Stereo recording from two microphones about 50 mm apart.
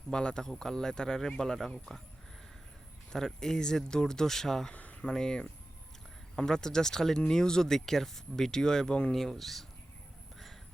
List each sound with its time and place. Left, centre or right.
0.1 s speech: centre
3.1 s speech: centre
4.7 s a sound: left
5.0 s speech: centre
9.1 s speech: centre